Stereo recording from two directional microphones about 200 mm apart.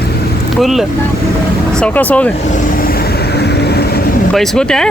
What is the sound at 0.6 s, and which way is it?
Speech, centre (ahead or behind).